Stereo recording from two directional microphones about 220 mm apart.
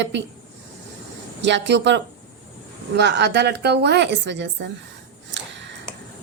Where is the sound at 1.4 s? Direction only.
55° right (ahead or behind).